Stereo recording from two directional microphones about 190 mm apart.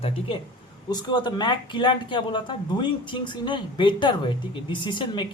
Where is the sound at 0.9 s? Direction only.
20° left (ahead or behind).